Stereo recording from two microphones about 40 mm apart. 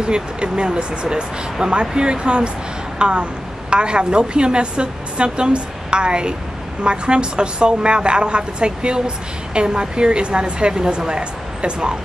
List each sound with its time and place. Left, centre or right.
0.0 s a woman's voice: right